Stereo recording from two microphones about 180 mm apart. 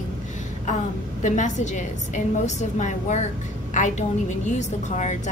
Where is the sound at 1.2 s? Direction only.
40° left (ahead or behind).